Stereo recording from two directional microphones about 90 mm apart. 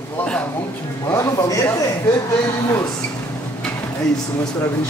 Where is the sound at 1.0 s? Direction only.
35° left (ahead or behind).